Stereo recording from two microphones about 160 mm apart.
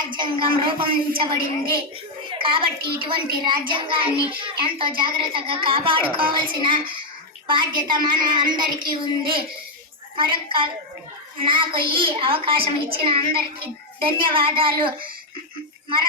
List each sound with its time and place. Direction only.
0.1 s a child's voice: 30° right (ahead or behind)